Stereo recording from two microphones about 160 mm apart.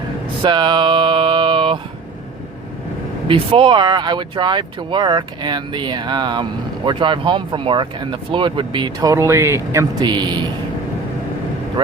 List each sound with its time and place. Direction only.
0.4 s speech: 30° right (ahead or behind)
3.2 s speech: 35° right (ahead or behind)